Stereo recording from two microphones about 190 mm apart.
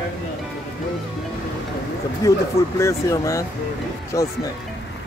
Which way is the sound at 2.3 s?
15° left (ahead or behind).